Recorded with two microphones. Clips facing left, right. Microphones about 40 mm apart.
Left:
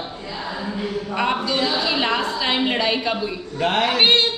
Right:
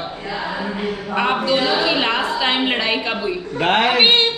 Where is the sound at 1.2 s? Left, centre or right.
Centre.